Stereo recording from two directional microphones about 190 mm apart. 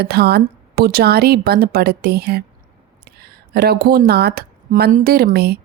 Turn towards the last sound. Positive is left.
turn(degrees=-55)  # may be behind; listen again after turning